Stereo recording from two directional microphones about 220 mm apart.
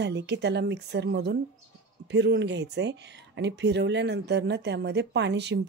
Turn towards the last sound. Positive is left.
turn(degrees=-50)  # may be behind; listen again after turning